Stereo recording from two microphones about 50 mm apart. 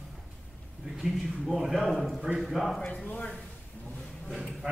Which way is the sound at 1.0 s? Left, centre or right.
Centre.